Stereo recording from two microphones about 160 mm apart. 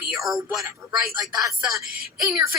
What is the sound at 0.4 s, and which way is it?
Speech, 20° right (ahead or behind).